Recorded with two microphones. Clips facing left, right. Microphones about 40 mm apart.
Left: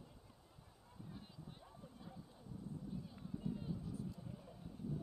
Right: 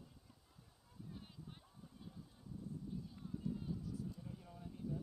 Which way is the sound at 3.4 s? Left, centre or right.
Centre.